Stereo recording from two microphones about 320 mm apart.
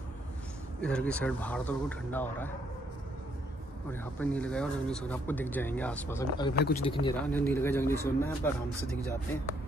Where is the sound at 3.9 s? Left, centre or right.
Centre.